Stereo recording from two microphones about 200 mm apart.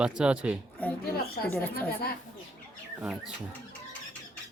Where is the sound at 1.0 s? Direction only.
50° left (ahead or behind).